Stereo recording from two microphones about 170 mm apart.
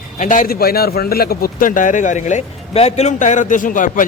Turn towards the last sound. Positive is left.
turn(degrees=50)  # may be behind; listen again after turning